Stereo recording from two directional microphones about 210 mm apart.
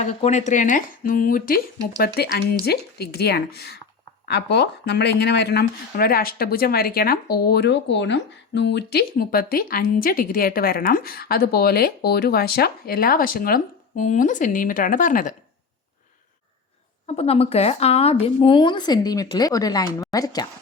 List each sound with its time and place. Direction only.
0.0 s speech: 30° left (ahead or behind)
17.1 s speech: 30° left (ahead or behind)